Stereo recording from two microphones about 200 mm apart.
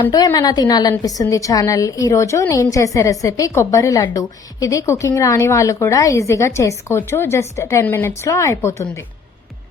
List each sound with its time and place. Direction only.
0.1 s a woman's voice: 20° left (ahead or behind)